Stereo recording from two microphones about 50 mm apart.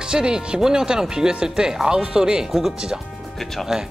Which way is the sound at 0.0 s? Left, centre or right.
Centre.